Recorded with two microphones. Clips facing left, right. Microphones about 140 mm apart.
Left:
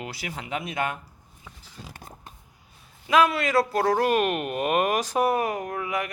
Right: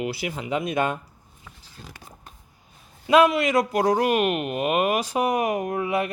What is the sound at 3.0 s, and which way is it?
Speech, 25° right (ahead or behind).